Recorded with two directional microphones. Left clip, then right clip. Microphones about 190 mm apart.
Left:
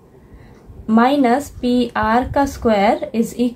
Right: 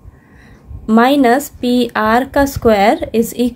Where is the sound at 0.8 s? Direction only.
40° right (ahead or behind).